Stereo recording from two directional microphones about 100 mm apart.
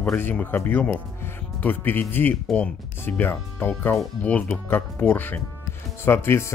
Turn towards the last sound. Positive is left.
turn(degrees=25)  # may be behind; listen again after turning